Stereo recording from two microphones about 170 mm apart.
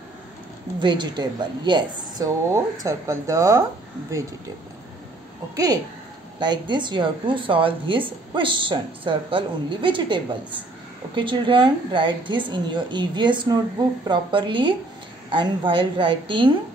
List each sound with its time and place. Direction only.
0.7 s speech: 25° right (ahead or behind)
6.4 s speech: 25° right (ahead or behind)